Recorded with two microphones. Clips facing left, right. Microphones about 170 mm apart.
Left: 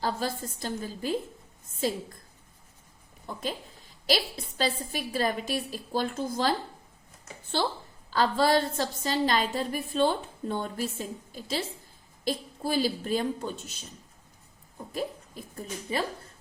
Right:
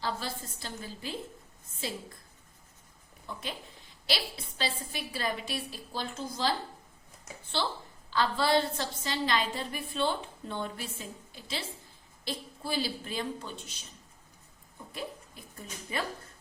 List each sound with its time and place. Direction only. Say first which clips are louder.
0.0 s a woman's voice: left 5 dB; 45° left (ahead or behind)
4.0 s a woman's voice: left 6 dB; 45° left (ahead or behind)
8.1 s a woman's voice: left 3 dB; 45° left (ahead or behind)
15.5 s a woman's voice: left 5 dB; 35° left (ahead or behind)